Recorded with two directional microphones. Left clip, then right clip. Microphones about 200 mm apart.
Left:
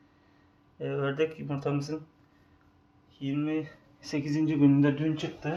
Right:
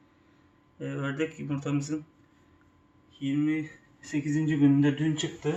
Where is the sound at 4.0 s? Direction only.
50° left (ahead or behind).